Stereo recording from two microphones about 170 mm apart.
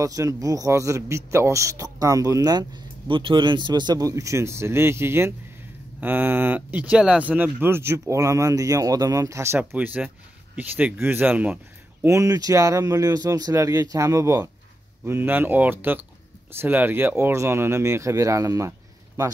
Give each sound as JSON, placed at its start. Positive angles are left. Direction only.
{"t": 0.0, "sound": "speech", "side_deg": -20}